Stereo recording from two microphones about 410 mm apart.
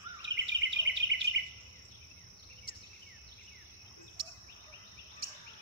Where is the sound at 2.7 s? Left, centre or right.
Left.